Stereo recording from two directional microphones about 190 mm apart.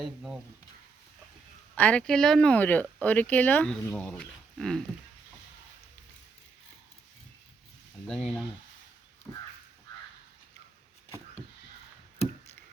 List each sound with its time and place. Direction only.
0.0 s speech: 5° right (ahead or behind)
1.7 s speech: 5° left (ahead or behind)
8.0 s speech: 5° left (ahead or behind)